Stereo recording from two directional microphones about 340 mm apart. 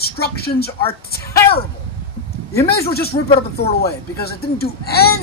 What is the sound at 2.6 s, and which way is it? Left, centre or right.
Speech, left.